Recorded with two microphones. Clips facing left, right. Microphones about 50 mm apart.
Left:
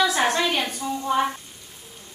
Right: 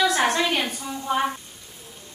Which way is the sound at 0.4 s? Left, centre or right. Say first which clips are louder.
Even; centre.